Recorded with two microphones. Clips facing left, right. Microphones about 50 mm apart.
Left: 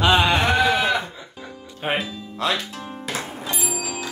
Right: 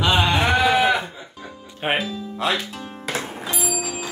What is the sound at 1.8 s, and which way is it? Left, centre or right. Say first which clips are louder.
Speech: right 2 dB; right.